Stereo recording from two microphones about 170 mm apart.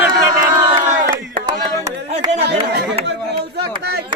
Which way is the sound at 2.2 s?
25° right (ahead or behind).